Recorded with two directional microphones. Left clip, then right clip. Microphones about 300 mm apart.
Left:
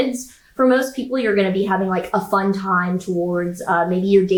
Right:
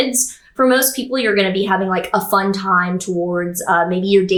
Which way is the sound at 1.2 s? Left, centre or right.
Centre.